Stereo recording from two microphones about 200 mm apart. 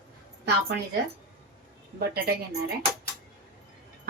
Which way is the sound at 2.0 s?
50° right (ahead or behind).